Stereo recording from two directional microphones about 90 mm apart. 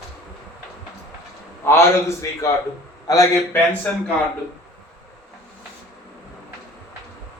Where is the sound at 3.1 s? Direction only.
40° left (ahead or behind).